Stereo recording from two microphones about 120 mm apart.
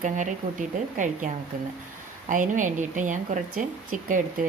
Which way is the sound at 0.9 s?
90° right.